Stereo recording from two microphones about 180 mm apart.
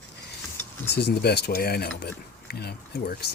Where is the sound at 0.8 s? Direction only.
65° left (ahead or behind).